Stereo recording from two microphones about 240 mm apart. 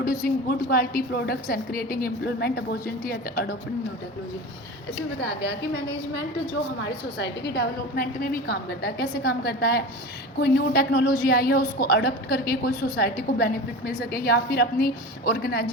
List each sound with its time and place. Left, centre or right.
0.0 s a woman's voice: left
5.2 s a woman's voice: left
7.2 s a woman's voice: left